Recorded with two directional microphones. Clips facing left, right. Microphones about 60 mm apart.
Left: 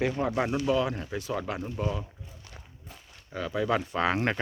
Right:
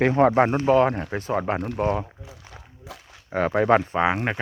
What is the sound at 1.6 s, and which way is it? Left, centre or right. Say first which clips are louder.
Speech: right 8 dB; right.